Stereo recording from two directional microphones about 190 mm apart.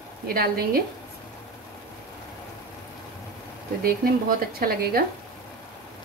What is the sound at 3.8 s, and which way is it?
A woman's voice, 55° right (ahead or behind).